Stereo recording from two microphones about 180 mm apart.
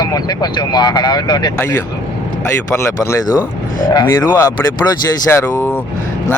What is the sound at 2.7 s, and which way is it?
Speech, 15° left (ahead or behind).